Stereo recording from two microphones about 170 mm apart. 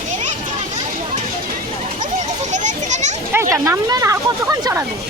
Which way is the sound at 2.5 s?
45° right (ahead or behind).